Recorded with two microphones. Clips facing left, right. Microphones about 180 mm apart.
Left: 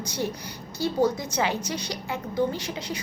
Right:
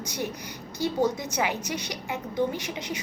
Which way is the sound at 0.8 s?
15° right (ahead or behind).